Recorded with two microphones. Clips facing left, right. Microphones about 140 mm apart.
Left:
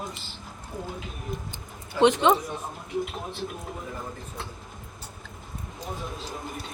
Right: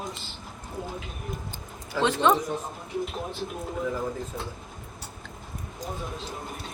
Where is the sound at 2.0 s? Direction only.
20° left (ahead or behind).